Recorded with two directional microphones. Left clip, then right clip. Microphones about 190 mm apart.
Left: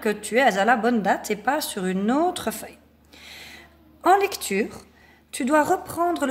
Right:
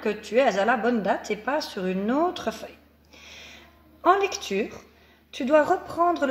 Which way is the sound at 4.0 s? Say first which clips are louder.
Left 2 dB; 50° left (ahead or behind).